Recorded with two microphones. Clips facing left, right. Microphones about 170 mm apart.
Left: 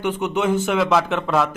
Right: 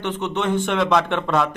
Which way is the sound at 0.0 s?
10° left (ahead or behind).